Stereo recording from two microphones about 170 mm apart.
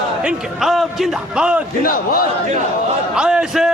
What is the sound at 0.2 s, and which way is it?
Speech, 5° right (ahead or behind).